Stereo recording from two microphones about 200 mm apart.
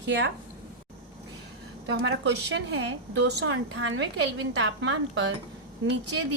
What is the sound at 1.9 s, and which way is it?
A woman's voice, 65° right (ahead or behind).